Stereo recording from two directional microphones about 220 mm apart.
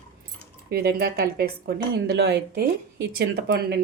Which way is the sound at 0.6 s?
45° right (ahead or behind).